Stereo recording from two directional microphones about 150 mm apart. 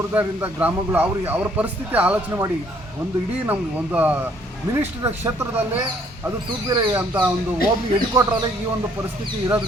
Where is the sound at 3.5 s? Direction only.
10° right (ahead or behind).